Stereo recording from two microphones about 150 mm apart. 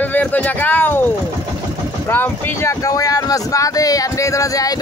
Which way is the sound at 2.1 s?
15° left (ahead or behind).